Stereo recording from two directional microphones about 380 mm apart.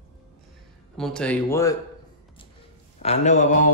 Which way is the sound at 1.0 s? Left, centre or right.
Centre.